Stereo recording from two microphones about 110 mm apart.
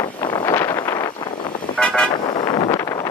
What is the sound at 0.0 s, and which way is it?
Wind noise, 45° left (ahead or behind).